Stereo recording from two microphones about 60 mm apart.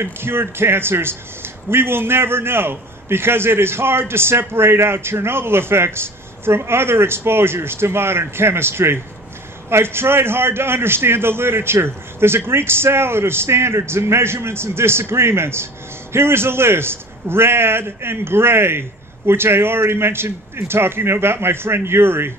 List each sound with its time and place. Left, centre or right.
0.0 s a man's voice: right